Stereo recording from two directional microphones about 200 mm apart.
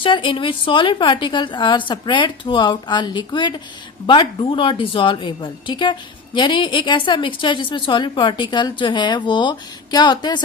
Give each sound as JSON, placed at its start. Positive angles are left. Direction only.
{"t": 0.0, "sound": "a woman's voice", "side_deg": 25}